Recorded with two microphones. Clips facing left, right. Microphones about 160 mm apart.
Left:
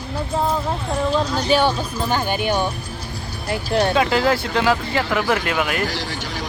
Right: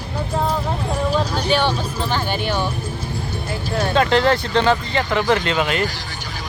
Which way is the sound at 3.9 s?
5° left (ahead or behind).